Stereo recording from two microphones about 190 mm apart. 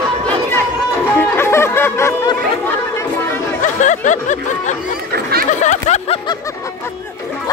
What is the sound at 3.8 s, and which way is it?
Speech, 40° left (ahead or behind).